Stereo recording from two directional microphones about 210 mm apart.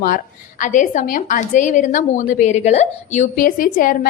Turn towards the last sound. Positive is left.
turn(degrees=40)  # may be behind; listen again after turning